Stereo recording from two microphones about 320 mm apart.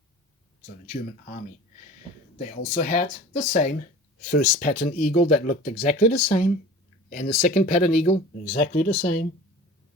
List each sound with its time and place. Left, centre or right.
2.4 s speech: left